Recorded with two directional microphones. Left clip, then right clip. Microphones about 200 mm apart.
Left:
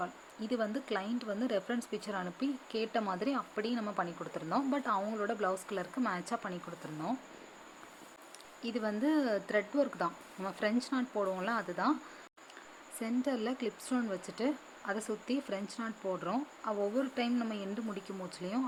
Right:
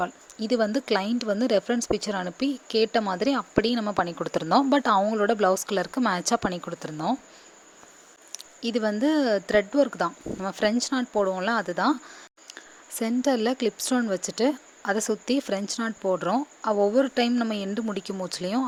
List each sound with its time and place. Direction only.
0.0 s speech: 45° right (ahead or behind)
8.3 s speech: 45° right (ahead or behind)
13.0 s speech: 45° right (ahead or behind)